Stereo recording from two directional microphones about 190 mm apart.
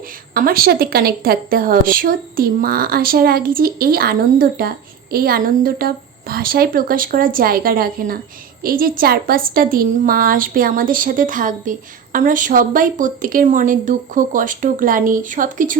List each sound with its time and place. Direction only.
0.3 s speech: 50° right (ahead or behind)